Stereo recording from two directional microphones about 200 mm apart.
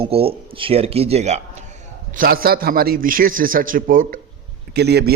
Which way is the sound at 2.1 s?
45° right (ahead or behind).